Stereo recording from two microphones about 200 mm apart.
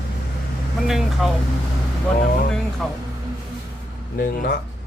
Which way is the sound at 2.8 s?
5° left (ahead or behind).